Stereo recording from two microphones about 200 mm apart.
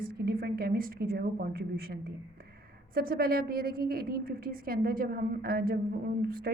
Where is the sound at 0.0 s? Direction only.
50° right (ahead or behind).